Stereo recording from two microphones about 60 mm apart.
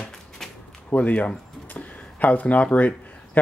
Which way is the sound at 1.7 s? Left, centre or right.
Left.